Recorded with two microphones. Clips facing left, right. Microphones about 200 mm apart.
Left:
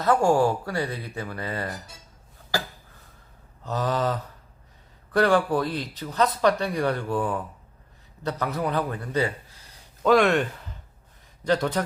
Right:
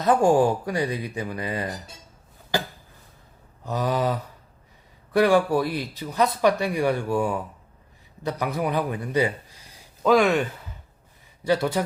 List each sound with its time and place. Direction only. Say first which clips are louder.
0.0 s speech: right 2 dB; 15° right (ahead or behind)
2.5 s a sound: right 3 dB; 20° right (ahead or behind)
3.6 s speech: right 1 dB; 10° right (ahead or behind)
10.0 s speech: even; centre (ahead or behind)
11.4 s speech: right 1 dB; 10° right (ahead or behind)